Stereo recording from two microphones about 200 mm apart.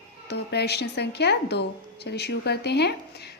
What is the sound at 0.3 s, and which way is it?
A woman's voice, 55° left (ahead or behind).